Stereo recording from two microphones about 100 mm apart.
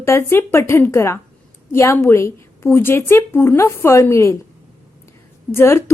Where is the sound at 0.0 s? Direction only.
25° left (ahead or behind).